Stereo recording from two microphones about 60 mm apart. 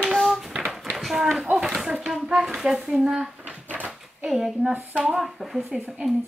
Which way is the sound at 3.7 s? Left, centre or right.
Right.